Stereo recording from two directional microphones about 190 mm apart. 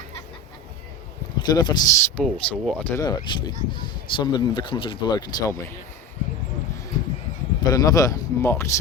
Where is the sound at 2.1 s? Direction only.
5° left (ahead or behind).